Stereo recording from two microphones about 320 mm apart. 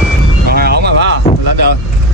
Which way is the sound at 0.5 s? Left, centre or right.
Right.